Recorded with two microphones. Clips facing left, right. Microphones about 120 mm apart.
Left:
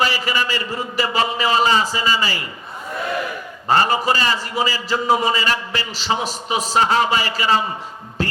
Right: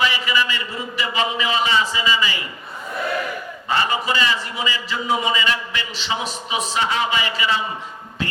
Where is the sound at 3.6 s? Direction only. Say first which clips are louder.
Left 5 dB; 40° left (ahead or behind).